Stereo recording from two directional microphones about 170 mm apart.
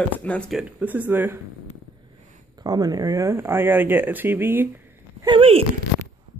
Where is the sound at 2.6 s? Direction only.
20° right (ahead or behind).